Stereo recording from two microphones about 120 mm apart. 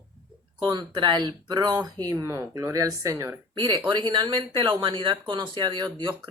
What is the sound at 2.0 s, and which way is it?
Speech, 25° right (ahead or behind).